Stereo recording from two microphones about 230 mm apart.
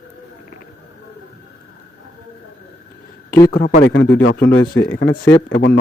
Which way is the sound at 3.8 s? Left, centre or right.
Left.